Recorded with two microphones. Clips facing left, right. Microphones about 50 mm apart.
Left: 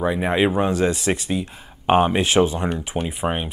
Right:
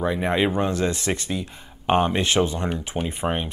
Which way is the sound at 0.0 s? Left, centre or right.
Centre.